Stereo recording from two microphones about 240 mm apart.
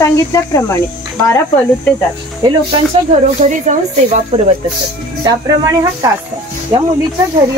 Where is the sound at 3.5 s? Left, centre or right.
Right.